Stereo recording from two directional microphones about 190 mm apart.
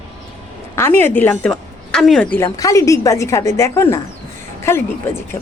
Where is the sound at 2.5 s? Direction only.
20° left (ahead or behind).